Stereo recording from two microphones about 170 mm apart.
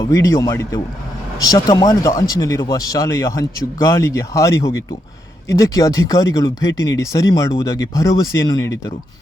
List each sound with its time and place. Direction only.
0.1 s speech: 20° left (ahead or behind)